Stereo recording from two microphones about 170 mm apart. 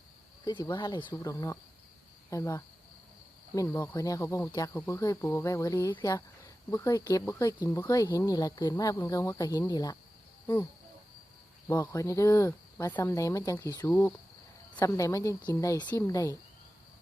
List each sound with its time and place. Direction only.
0.4 s speech: 25° left (ahead or behind)
11.7 s speech: 15° left (ahead or behind)